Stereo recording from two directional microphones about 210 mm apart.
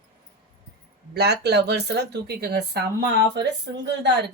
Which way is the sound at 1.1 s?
50° right (ahead or behind).